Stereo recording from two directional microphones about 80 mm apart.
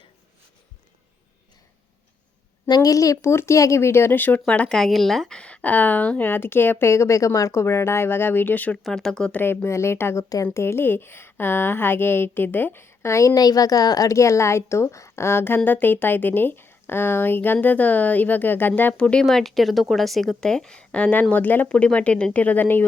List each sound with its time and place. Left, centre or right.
2.6 s a woman's voice: left; by 4.8 s centre
4.8 s a woman's voice: centre
8.8 s a woman's voice: centre
9.3 s speech: left
10.2 s speech: left
10.6 s a woman's voice: left
19.2 s a woman's voice: centre; by 22.8 s left